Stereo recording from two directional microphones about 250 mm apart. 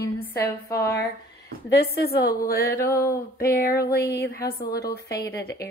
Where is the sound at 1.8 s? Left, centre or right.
Left.